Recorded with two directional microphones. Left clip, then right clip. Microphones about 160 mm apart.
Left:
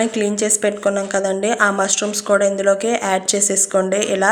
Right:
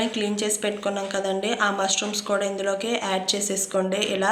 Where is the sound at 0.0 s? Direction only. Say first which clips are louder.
Left 7 dB; 35° left (ahead or behind).